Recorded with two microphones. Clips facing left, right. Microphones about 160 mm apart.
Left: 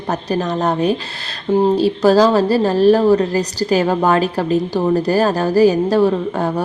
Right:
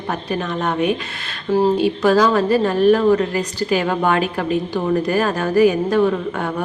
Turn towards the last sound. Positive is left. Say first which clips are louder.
# left 3 dB
turn(degrees=35)  # may be behind; listen again after turning